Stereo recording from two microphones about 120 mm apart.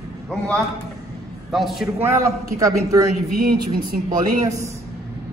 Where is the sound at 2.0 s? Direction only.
25° right (ahead or behind).